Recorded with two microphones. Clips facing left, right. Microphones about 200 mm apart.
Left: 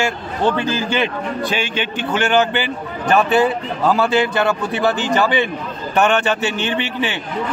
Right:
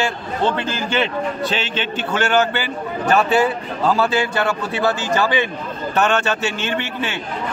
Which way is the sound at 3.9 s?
15° left (ahead or behind).